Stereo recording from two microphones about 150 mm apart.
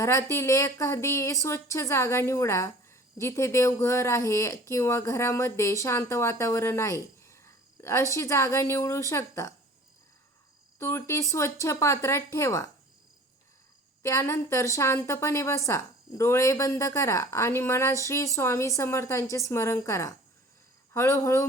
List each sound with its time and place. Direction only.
0.0 s speech: 20° left (ahead or behind)
10.8 s speech: 15° left (ahead or behind)
14.0 s speech: 20° left (ahead or behind)